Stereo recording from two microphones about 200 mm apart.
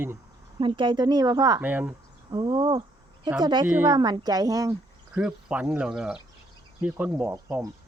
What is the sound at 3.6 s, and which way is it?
Speech, 10° right (ahead or behind).